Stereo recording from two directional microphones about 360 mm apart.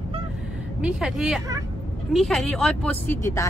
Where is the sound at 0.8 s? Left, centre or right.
Centre.